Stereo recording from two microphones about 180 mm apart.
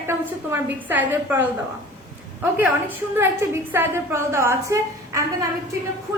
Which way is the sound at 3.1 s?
15° right (ahead or behind).